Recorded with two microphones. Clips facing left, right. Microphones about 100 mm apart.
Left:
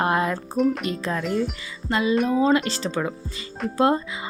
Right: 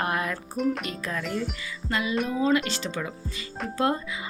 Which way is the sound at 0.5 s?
Centre (ahead or behind).